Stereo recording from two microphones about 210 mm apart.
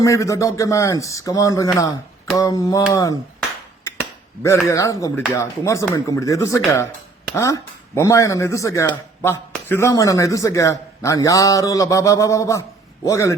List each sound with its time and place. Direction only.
0.0 s speech: 15° left (ahead or behind)
4.4 s speech: 15° left (ahead or behind)